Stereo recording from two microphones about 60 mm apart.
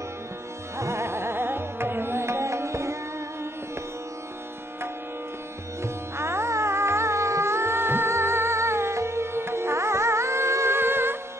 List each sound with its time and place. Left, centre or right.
0.7 s music: right
5.8 s music: right